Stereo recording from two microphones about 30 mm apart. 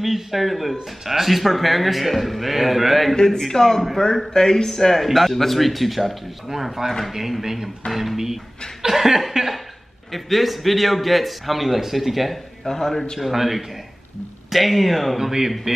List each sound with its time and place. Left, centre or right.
0.0 s a man's voice: centre
3.3 s a man's voice: centre
5.0 s a man's voice: centre
12.6 s a man's voice: centre
13.2 s a man's voice: centre
15.1 s speech: centre